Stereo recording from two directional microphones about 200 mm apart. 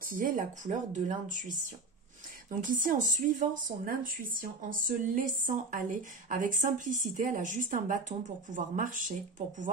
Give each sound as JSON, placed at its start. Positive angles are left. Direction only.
{"t": 0.0, "sound": "a woman's voice", "side_deg": -40}
{"t": 2.7, "sound": "a woman's voice", "side_deg": -40}